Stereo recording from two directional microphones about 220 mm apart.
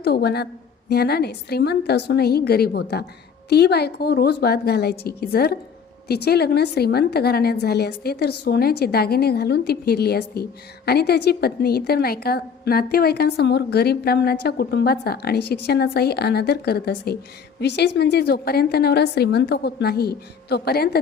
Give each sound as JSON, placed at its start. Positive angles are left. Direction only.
{"t": 0.0, "sound": "a woman's voice", "side_deg": 45}